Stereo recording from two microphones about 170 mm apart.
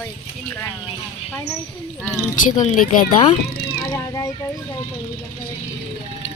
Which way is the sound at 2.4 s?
45° left (ahead or behind).